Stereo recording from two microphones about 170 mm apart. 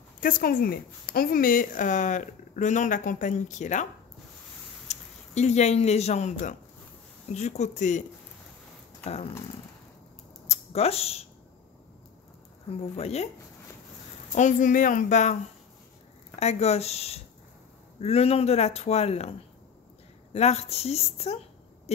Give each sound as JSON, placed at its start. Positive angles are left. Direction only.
{"t": 0.2, "sound": "speech", "side_deg": 55}
{"t": 4.8, "sound": "speech", "side_deg": 40}
{"t": 9.0, "sound": "speech", "side_deg": 40}
{"t": 10.5, "sound": "speech", "side_deg": 40}
{"t": 12.7, "sound": "speech", "side_deg": 40}
{"t": 14.3, "sound": "speech", "side_deg": 45}
{"t": 16.3, "sound": "speech", "side_deg": 40}
{"t": 20.3, "sound": "a woman's voice", "side_deg": 40}